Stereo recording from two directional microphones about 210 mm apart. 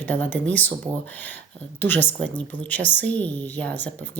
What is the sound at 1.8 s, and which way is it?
A woman's voice, 10° left (ahead or behind).